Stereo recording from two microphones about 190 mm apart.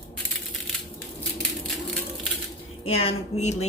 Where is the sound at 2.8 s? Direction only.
30° left (ahead or behind).